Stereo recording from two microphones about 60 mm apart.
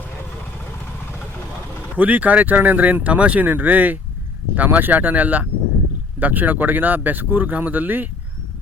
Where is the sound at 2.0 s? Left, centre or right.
Right.